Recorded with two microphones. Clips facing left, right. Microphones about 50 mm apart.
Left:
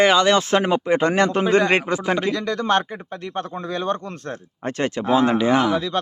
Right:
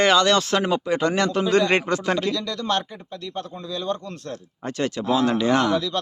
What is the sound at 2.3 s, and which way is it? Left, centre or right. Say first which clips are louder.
Speech: left 4 dB; left.